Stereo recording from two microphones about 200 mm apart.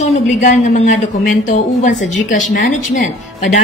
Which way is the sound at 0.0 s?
35° left (ahead or behind).